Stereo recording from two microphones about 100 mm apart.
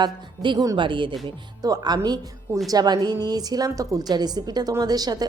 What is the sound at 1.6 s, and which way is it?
A woman's voice, 40° right (ahead or behind).